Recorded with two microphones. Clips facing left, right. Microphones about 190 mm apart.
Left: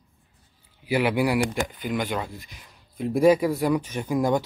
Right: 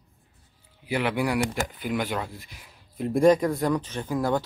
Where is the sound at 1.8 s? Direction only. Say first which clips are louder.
Right 1 dB; 5° right (ahead or behind); by 4.4 s 15° left (ahead or behind).